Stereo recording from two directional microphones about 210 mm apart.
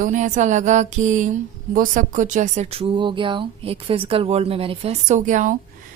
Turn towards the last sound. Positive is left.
turn(degrees=-35)  # may be behind; listen again after turning